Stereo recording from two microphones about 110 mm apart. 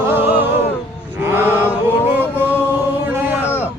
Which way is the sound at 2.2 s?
15° right (ahead or behind).